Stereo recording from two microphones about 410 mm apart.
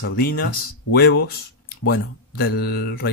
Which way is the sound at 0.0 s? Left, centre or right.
Left.